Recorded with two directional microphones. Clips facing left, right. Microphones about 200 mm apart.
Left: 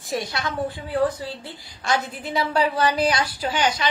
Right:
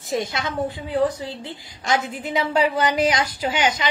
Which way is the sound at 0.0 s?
20° right (ahead or behind).